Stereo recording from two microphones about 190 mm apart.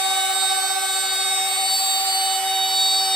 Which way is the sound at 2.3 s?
5° left (ahead or behind).